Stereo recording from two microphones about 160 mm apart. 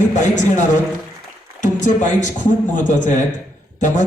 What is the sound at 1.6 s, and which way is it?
A man's voice, 50° left (ahead or behind).